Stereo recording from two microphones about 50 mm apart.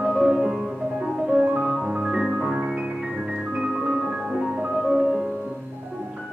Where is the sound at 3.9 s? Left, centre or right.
Centre.